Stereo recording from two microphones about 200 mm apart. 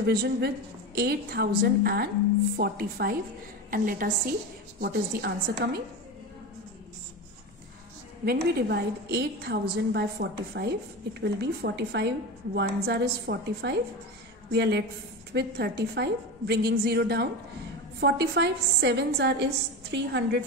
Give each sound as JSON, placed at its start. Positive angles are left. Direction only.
{"t": 0.0, "sound": "a woman's voice", "side_deg": -55}
{"t": 8.3, "sound": "a woman's voice", "side_deg": -50}